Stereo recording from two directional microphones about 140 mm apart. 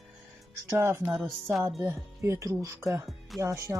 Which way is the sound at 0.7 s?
20° right (ahead or behind).